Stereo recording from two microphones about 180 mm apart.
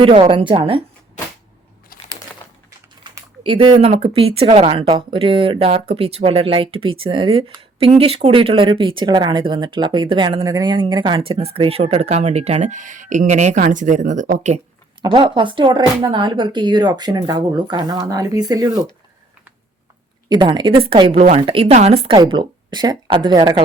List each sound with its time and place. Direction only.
0.0 s speech: 30° right (ahead or behind)
1.9 s crumpling: 55° left (ahead or behind)
3.0 s speech: 30° right (ahead or behind)
15.0 s speech: 25° right (ahead or behind)
20.3 s speech: 25° right (ahead or behind)